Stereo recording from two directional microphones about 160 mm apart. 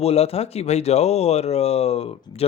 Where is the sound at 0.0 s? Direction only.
40° left (ahead or behind).